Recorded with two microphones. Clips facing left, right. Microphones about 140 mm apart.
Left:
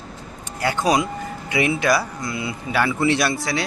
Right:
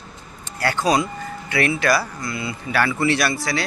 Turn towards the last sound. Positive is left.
turn(degrees=0)  # may be behind; listen again after turning